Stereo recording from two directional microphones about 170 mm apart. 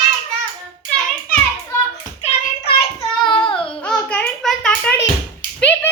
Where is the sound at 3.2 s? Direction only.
30° left (ahead or behind).